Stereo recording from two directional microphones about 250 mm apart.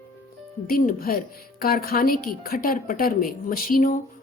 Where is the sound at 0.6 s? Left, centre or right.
Left.